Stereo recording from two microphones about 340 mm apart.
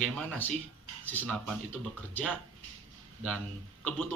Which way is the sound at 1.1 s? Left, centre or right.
Centre.